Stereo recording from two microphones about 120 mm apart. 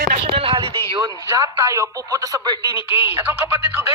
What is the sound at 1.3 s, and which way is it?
A woman's voice, 25° right (ahead or behind).